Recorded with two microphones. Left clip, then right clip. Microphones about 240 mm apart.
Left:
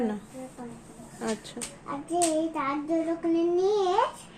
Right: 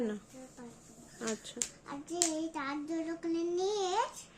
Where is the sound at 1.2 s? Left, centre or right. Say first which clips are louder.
Left 6 dB; right.